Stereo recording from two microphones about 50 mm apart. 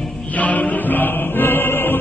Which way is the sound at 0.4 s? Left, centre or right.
Left.